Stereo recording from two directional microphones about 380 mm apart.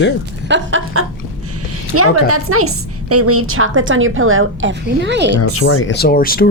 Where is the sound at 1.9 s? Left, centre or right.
Right.